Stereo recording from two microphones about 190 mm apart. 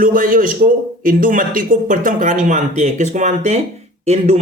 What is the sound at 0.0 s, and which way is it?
A man's voice, 45° right (ahead or behind).